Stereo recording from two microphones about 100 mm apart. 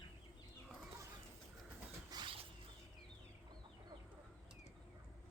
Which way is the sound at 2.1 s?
40° right (ahead or behind).